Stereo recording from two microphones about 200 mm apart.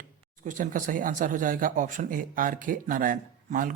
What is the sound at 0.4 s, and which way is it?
Speech, 40° right (ahead or behind).